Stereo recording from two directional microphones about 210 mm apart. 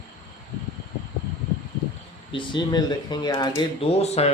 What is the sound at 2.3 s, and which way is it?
Speech, 20° left (ahead or behind).